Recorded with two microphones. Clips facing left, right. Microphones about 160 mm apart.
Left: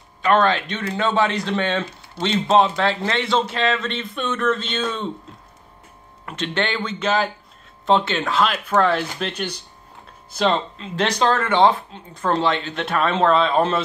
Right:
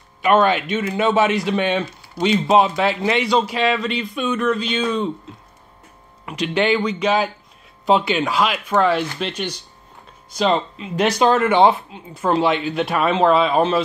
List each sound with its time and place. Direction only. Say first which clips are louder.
0.2 s speech: right 2 dB; 15° right (ahead or behind)
6.2 s speech: right 5 dB; 10° right (ahead or behind)
10.3 s speech: right 2 dB; 5° right (ahead or behind)